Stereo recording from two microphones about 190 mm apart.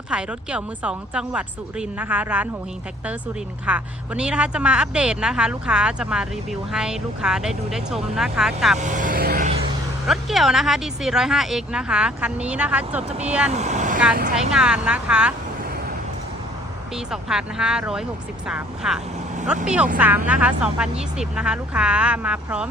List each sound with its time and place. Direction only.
0.1 s a woman's voice: 5° right (ahead or behind)
3.7 s a woman's voice: 5° right (ahead or behind)
8.8 s speech: 40° right (ahead or behind)
10.1 s a woman's voice: centre (ahead or behind)
13.5 s speech: 35° right (ahead or behind)
14.5 s a woman's voice: 5° right (ahead or behind)
16.9 s a woman's voice: 5° right (ahead or behind)